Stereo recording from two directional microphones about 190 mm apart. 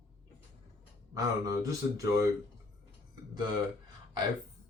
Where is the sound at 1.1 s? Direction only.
15° right (ahead or behind).